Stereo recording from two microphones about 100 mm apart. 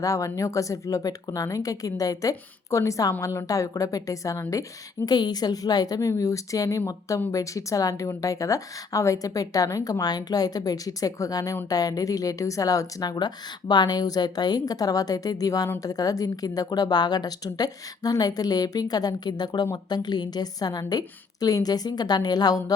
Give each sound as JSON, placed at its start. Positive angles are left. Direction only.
{"t": 0.0, "sound": "speech", "side_deg": 35}
{"t": 5.0, "sound": "a woman's voice", "side_deg": 45}